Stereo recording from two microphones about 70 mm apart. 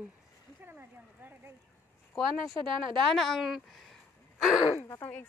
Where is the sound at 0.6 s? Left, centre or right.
Right.